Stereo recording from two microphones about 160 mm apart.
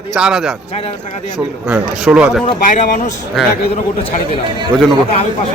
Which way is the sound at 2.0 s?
5° right (ahead or behind).